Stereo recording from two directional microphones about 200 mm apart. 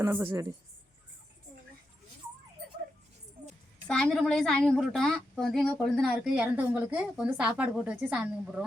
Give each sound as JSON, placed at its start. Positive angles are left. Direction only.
{"t": 0.0, "sound": "a woman's voice", "side_deg": -10}
{"t": 3.8, "sound": "a woman's voice", "side_deg": 5}